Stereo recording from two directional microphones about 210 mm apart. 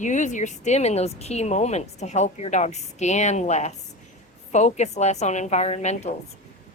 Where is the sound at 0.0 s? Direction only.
35° left (ahead or behind).